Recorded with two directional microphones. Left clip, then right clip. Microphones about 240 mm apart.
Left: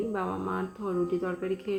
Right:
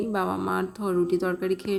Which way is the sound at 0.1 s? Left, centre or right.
Right.